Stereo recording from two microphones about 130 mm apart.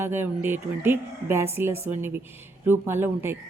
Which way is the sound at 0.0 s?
15° right (ahead or behind).